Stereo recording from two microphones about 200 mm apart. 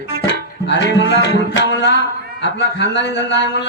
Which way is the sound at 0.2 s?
60° left (ahead or behind).